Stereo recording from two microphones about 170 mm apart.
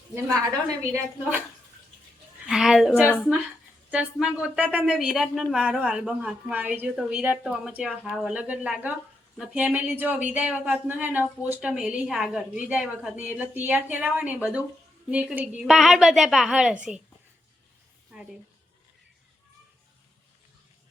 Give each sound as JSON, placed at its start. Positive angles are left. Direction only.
{"t": 0.1, "sound": "a woman's voice", "side_deg": -15}
{"t": 2.5, "sound": "a woman's voice", "side_deg": 0}
{"t": 18.1, "sound": "a sound", "side_deg": -5}